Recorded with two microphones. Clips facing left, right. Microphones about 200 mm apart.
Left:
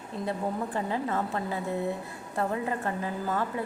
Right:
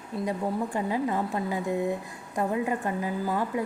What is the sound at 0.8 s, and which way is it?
A woman's voice, 15° right (ahead or behind).